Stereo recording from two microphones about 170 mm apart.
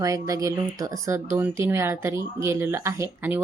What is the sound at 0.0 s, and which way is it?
Speech, 20° right (ahead or behind).